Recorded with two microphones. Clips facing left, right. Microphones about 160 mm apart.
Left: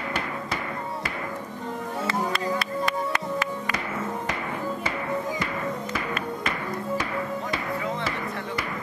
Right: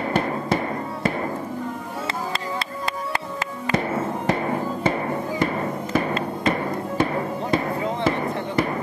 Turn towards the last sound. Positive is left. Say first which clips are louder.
# right 5 dB
turn(degrees=-30)  # may be behind; listen again after turning